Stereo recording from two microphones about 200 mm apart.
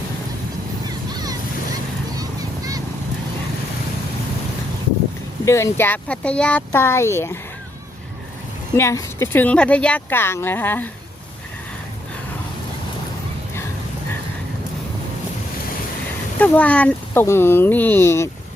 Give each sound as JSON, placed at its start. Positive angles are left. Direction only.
{"t": 1.1, "sound": "a sound", "side_deg": -20}
{"t": 5.5, "sound": "speech", "side_deg": 15}
{"t": 8.8, "sound": "speech", "side_deg": 15}
{"t": 16.4, "sound": "speech", "side_deg": 5}